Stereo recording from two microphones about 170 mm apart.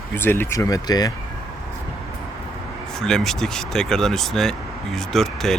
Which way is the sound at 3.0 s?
5° left (ahead or behind).